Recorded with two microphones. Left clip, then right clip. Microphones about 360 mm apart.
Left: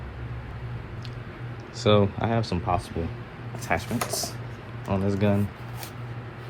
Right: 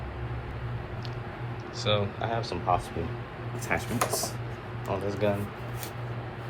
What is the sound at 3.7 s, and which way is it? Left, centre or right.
Speech, centre.